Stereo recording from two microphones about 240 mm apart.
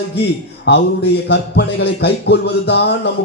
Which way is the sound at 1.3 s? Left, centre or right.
Left.